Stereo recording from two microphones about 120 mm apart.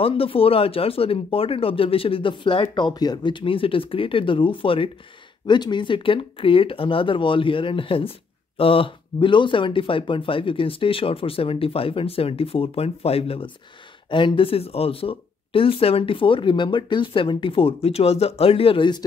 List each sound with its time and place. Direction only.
0.0 s speech: 50° left (ahead or behind)